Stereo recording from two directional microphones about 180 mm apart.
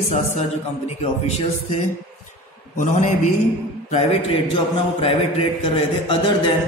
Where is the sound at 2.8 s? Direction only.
40° left (ahead or behind).